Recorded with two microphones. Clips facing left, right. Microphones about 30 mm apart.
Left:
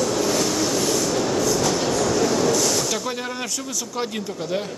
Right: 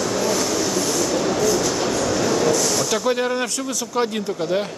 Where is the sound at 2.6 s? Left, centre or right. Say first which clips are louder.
Right 1 dB; centre.